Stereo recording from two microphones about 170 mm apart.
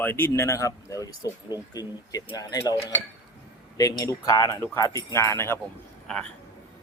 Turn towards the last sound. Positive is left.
turn(degrees=5)  # may be behind; listen again after turning